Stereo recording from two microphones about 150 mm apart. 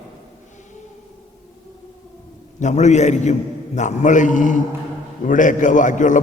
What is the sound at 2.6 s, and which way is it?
A man's voice, 50° left (ahead or behind).